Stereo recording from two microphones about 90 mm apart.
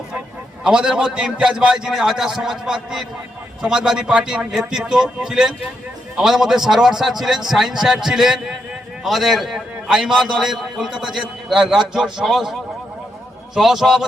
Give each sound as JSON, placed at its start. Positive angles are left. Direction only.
{"t": 0.6, "sound": "a man's voice", "side_deg": -10}
{"t": 13.6, "sound": "a man's voice", "side_deg": -5}